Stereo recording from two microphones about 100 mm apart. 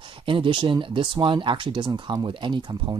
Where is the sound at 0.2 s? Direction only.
60° right (ahead or behind).